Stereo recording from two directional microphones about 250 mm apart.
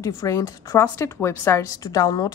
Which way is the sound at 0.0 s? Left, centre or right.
Centre.